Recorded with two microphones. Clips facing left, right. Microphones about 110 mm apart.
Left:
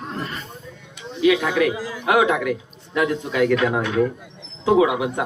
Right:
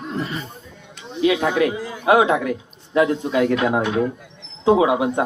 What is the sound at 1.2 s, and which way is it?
A man's voice, 35° right (ahead or behind).